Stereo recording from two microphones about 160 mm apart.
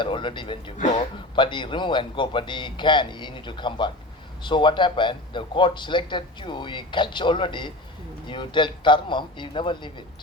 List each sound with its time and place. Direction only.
0.0 s speech: 30° left (ahead or behind)